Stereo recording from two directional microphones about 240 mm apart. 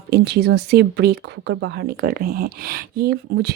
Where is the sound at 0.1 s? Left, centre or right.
Right.